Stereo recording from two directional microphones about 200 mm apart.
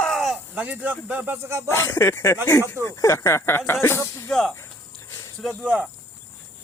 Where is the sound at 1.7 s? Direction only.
10° left (ahead or behind); by 5.9 s 5° right (ahead or behind).